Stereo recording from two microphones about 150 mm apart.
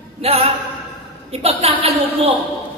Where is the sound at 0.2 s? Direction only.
40° right (ahead or behind).